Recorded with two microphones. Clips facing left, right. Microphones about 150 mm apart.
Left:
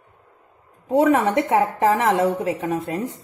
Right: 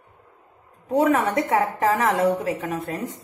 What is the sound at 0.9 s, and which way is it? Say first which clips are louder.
A woman's voice: left 3 dB; 30° left (ahead or behind).